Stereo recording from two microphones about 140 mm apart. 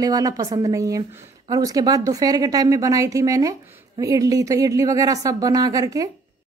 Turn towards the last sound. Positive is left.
turn(degrees=-25)  # may be behind; listen again after turning